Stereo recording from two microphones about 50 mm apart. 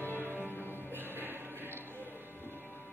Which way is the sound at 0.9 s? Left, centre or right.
Right.